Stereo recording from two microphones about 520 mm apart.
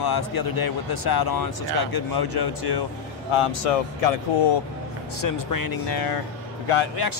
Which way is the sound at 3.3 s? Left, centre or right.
Left.